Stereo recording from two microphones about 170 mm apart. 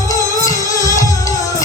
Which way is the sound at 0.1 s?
20° left (ahead or behind).